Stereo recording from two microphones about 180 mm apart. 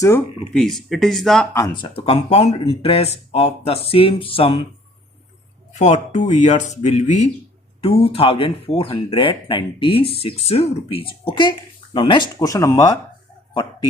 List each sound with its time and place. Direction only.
0.5 s speech: centre (ahead or behind)
1.5 s speech: 20° left (ahead or behind)
2.0 s speech: 35° left (ahead or behind)
5.8 s speech: 40° left (ahead or behind); by 13.0 s 20° left (ahead or behind)
13.5 s a sound: 25° left (ahead or behind)